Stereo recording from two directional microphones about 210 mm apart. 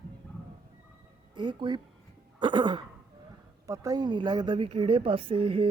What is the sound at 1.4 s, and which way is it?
A woman's voice, 20° right (ahead or behind).